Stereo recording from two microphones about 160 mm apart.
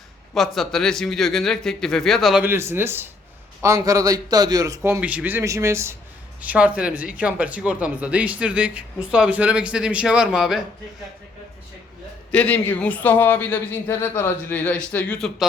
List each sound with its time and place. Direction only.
0.3 s a man's voice: centre (ahead or behind)
2.4 s speech: 15° right (ahead or behind)
12.3 s a man's voice: 10° left (ahead or behind)